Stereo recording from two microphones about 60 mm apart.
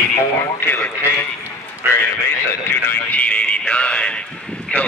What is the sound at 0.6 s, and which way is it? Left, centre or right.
Speech, left.